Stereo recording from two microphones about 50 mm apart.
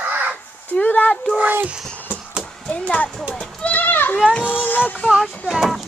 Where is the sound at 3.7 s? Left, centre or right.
Left.